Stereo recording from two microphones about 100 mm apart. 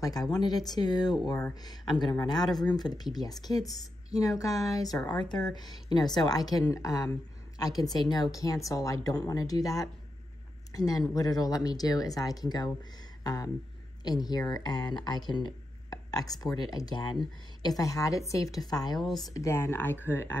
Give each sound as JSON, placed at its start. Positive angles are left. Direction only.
{"t": 0.0, "sound": "speech", "side_deg": 40}
{"t": 18.9, "sound": "speech", "side_deg": 0}
{"t": 19.3, "sound": "speech", "side_deg": 25}